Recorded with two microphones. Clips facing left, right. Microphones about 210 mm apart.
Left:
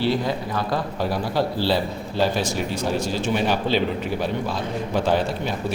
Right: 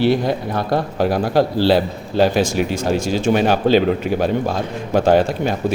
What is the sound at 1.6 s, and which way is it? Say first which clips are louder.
Speech: right 7 dB; 80° right.